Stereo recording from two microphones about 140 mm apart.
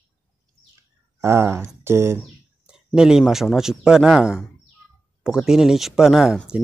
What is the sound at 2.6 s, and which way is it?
Speech, 5° right (ahead or behind).